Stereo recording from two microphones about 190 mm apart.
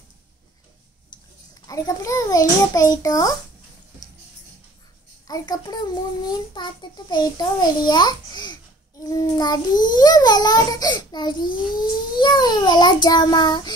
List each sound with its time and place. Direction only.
1.7 s a child's voice: 20° left (ahead or behind)
5.2 s a child's voice: 20° left (ahead or behind)